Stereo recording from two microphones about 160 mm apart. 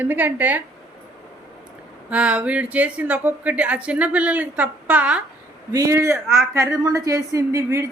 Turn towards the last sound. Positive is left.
turn(degrees=-20)  # may be behind; listen again after turning